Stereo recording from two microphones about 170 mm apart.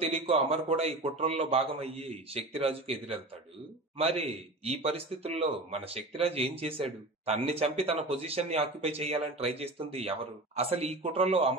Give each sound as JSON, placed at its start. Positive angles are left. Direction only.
{"t": 0.0, "sound": "a man's voice", "side_deg": -35}